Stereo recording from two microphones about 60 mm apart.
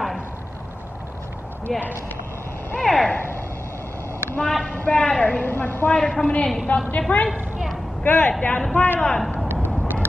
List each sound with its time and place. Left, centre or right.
1.7 s speech: centre
2.8 s a sound: centre
4.4 s a sound: centre
4.7 s a woman's voice: centre
5.4 s a man's voice: left
5.9 s a woman's voice: centre
8.7 s a man's voice: left
9.0 s a woman's voice: centre